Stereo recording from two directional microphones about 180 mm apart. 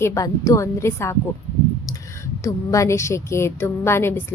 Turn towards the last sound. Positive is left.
turn(degrees=15)  # may be behind; listen again after turning